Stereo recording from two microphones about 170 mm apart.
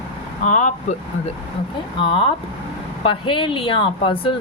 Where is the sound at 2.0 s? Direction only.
30° left (ahead or behind).